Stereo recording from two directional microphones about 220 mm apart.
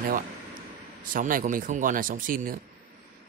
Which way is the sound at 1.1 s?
35° right (ahead or behind).